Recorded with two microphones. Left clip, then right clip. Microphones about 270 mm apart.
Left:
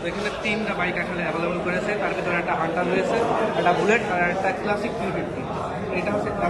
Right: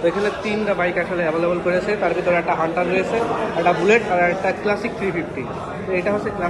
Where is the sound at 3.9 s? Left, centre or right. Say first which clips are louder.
Right 5 dB; centre.